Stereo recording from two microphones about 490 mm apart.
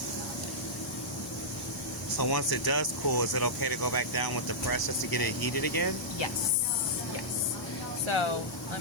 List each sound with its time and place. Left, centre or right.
2.1 s speech: left
8.0 s speech: left